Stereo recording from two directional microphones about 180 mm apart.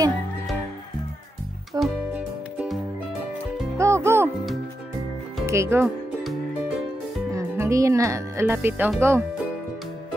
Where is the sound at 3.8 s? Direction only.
15° right (ahead or behind).